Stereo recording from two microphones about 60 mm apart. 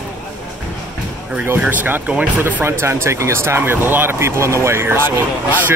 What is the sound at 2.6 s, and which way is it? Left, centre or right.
Speech, right.